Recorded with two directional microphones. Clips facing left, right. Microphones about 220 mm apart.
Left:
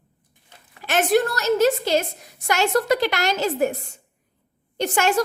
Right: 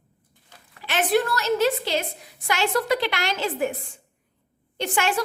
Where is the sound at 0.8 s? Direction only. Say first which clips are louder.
Left 3 dB; 45° left (ahead or behind).